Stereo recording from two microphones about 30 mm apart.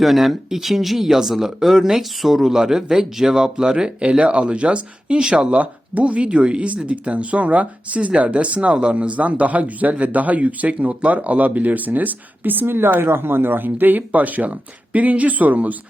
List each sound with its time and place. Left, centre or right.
0.0 s speech: centre; by 4.2 s right
4.2 s speech: right
5.5 s speech: right
6.2 s speech: right
6.8 s speech: right
14.9 s speech: right